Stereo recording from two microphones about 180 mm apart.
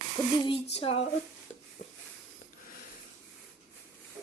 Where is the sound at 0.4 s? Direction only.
30° left (ahead or behind).